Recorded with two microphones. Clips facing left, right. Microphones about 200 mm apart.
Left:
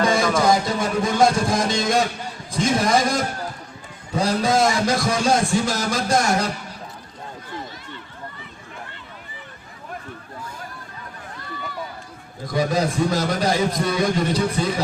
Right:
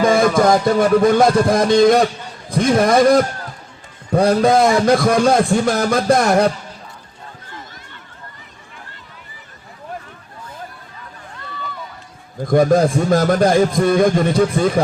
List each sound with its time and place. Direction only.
0.0 s music: 55° right (ahead or behind)
2.5 s a man's voice: 55° right (ahead or behind)
12.5 s a man's voice: 55° right (ahead or behind)